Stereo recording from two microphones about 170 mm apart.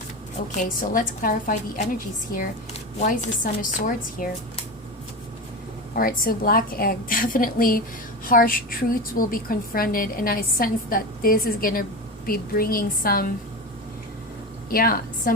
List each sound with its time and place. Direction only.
0.5 s a woman's voice: 50° left (ahead or behind)
5.9 s a woman's voice: 55° left (ahead or behind)
14.7 s a woman's voice: 60° left (ahead or behind)